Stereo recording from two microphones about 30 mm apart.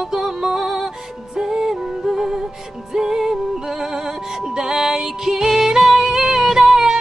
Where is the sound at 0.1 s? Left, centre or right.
Right.